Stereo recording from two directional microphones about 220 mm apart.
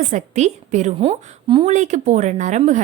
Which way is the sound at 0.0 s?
30° right (ahead or behind).